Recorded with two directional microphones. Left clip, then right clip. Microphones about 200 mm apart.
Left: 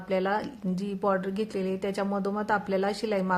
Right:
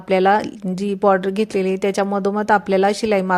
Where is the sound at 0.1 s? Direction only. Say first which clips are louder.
Right 12 dB; 35° right (ahead or behind).